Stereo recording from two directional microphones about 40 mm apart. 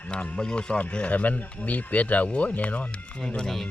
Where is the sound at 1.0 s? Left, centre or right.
Left.